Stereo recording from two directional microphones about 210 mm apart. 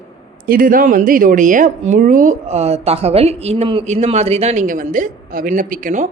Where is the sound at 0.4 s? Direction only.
40° right (ahead or behind).